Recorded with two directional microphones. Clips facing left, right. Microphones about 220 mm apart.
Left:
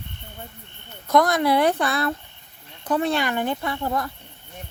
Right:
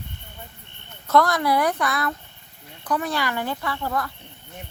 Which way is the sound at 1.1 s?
20° left (ahead or behind).